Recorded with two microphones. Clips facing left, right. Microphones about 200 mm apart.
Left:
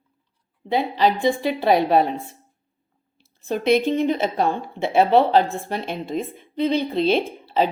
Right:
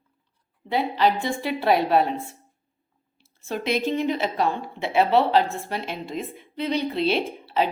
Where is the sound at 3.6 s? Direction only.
55° left (ahead or behind).